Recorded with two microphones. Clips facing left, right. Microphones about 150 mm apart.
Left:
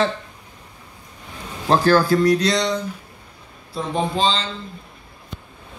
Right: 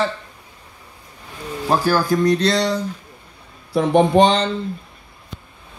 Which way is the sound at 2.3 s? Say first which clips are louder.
Right 2 dB; 30° right (ahead or behind).